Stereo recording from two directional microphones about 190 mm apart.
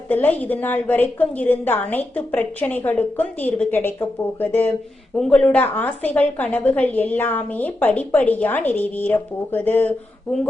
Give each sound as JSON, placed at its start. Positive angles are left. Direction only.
{"t": 0.1, "sound": "a woman's voice", "side_deg": 10}